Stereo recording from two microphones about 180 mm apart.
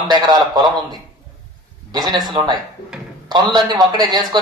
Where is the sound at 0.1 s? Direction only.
25° right (ahead or behind).